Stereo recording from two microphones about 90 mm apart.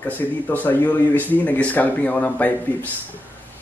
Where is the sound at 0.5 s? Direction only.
20° left (ahead or behind).